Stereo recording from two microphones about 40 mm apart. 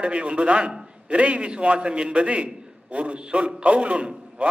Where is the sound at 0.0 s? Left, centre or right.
Right.